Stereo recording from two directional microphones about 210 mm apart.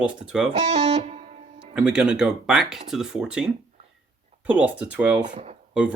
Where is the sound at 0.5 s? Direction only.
35° right (ahead or behind).